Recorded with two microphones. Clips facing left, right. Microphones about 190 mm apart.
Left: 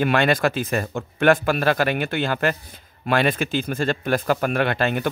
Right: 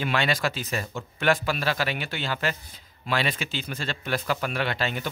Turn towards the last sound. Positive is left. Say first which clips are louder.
# left 7 dB
turn(degrees=55)  # may be behind; listen again after turning